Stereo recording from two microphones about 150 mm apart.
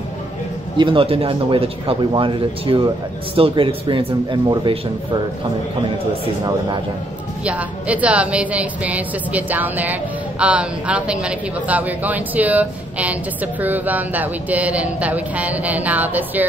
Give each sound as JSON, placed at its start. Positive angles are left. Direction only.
{"t": 0.7, "sound": "speech", "side_deg": -35}
{"t": 7.4, "sound": "a woman's voice", "side_deg": -10}